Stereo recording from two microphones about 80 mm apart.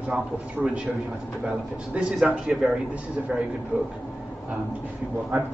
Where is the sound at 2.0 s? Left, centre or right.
Centre.